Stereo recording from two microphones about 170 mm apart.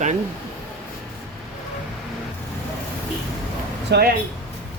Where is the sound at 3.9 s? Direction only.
70° right (ahead or behind).